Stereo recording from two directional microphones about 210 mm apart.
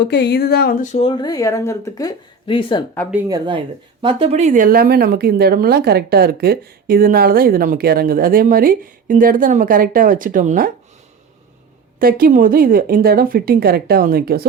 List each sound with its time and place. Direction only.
0.0 s speech: 55° left (ahead or behind)
0.9 s speech: 25° left (ahead or behind)
3.2 s a woman's voice: 20° right (ahead or behind); by 10.7 s 40° right (ahead or behind)
11.9 s a woman's voice: 45° right (ahead or behind)